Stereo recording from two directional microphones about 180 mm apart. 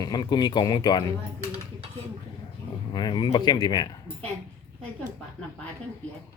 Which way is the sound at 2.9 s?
25° left (ahead or behind).